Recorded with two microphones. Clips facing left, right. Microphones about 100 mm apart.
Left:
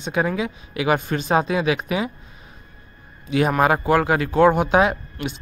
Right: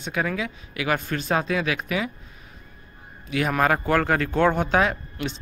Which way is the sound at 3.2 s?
25° left (ahead or behind).